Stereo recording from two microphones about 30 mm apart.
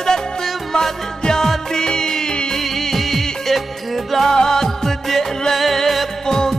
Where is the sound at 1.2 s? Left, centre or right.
Left.